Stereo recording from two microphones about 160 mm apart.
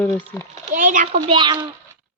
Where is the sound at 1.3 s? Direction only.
30° right (ahead or behind).